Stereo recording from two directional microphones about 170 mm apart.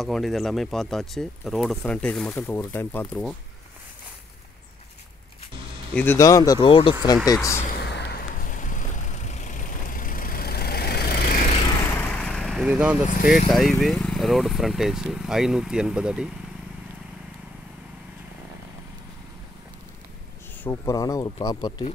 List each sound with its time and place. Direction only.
0.0 s speech: centre (ahead or behind)
5.9 s speech: 15° left (ahead or behind); by 7.2 s 30° left (ahead or behind)
7.2 s speech: 15° left (ahead or behind)
7.7 s vehicle: 85° left; by 11.4 s 60° left (ahead or behind)
11.8 s vehicle: 10° left (ahead or behind); by 12.9 s 5° right (ahead or behind)
13.5 s speech: centre (ahead or behind)
20.6 s speech: 15° left (ahead or behind)